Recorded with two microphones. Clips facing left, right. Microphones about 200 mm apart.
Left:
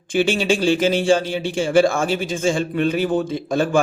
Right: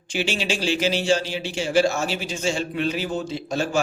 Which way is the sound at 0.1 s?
50° left (ahead or behind).